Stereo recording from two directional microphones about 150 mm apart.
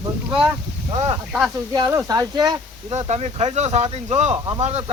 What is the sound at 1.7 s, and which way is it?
Speech, 25° right (ahead or behind).